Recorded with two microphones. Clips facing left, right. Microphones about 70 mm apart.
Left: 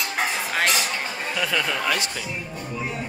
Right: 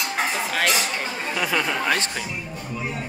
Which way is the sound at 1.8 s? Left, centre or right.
Right.